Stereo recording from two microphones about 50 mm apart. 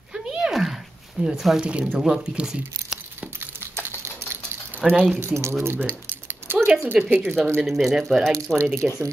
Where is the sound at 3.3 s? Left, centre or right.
Right.